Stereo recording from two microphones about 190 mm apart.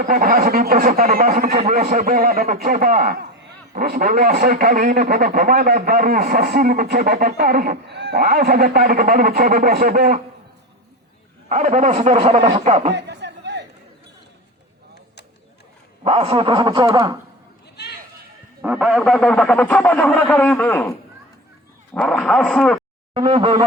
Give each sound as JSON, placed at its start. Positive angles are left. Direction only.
{"t": 0.0, "sound": "a man's voice", "side_deg": -45}
{"t": 11.4, "sound": "a man's voice", "side_deg": -40}
{"t": 12.9, "sound": "a sound", "side_deg": -65}
{"t": 16.0, "sound": "speech", "side_deg": -30}
{"t": 18.6, "sound": "speech", "side_deg": -5}
{"t": 21.9, "sound": "speech", "side_deg": 5}
{"t": 23.1, "sound": "speech", "side_deg": -30}